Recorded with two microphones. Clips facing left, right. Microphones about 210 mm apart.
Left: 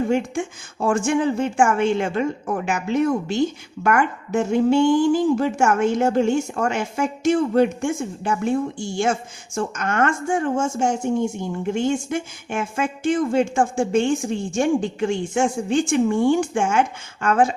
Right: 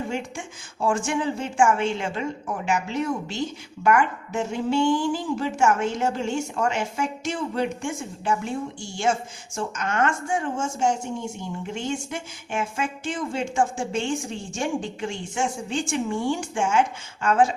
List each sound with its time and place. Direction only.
0.1 s a woman's voice: 50° left (ahead or behind)
9.6 s a woman's voice: 50° left (ahead or behind)